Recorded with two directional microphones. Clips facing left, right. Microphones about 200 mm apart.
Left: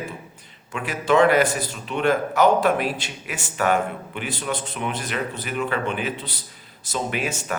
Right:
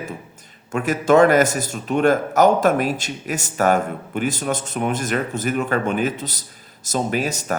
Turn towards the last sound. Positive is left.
turn(degrees=-40)  # may be behind; listen again after turning